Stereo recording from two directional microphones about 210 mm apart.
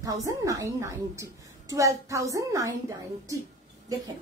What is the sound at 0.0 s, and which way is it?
A woman's voice, 15° right (ahead or behind).